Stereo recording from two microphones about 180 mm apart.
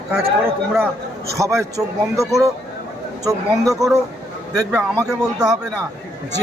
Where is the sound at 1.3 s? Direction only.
15° right (ahead or behind).